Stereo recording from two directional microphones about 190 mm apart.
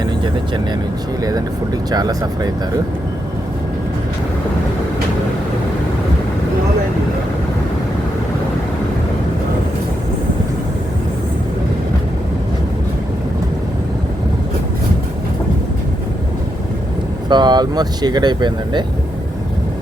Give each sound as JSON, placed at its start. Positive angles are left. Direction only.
{"t": 1.9, "sound": "speech", "side_deg": -20}
{"t": 17.2, "sound": "speech", "side_deg": -25}